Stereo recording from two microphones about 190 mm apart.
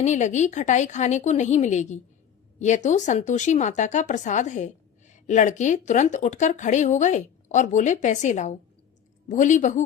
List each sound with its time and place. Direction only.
0.0 s speech: 40° left (ahead or behind)